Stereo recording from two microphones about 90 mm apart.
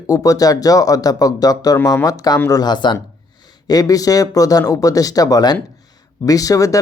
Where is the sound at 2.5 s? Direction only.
50° left (ahead or behind).